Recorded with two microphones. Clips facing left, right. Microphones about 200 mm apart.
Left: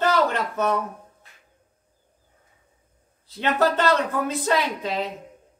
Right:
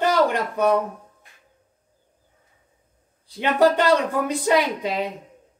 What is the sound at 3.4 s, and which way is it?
Speech, 15° right (ahead or behind).